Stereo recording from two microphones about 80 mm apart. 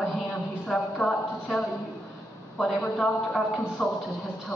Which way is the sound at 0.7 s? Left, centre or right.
Centre.